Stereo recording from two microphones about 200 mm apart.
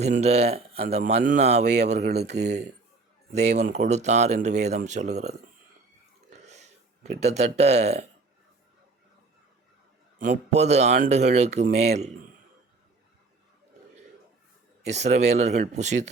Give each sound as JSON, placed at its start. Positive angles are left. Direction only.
{"t": 0.2, "sound": "speech", "side_deg": -35}
{"t": 2.0, "sound": "speech", "side_deg": -55}
{"t": 3.3, "sound": "speech", "side_deg": -35}
{"t": 6.3, "sound": "a sound", "side_deg": -35}
{"t": 7.2, "sound": "speech", "side_deg": -35}
{"t": 10.2, "sound": "speech", "side_deg": -40}
{"t": 14.8, "sound": "speech", "side_deg": -35}